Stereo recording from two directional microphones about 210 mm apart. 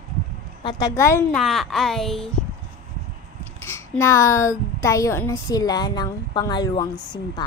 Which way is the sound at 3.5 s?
10° left (ahead or behind).